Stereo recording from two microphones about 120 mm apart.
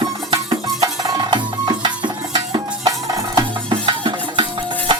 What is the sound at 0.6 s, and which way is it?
Music, 30° right (ahead or behind).